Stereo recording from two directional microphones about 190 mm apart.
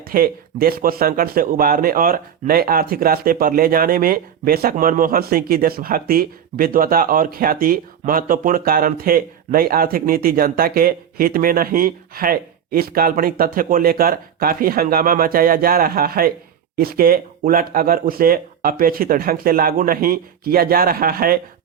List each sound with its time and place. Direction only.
0.1 s a man's voice: 50° right (ahead or behind)